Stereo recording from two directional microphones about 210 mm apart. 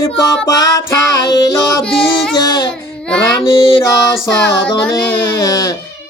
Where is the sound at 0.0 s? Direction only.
15° left (ahead or behind).